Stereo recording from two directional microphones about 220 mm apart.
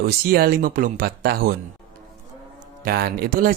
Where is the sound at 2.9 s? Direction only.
45° right (ahead or behind).